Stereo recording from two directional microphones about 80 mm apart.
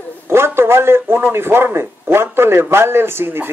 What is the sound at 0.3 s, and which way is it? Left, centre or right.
A man's voice, right.